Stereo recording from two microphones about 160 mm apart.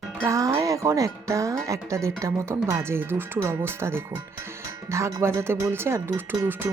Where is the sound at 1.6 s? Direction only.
20° right (ahead or behind).